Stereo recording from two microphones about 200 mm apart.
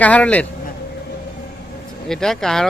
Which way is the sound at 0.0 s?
5° left (ahead or behind).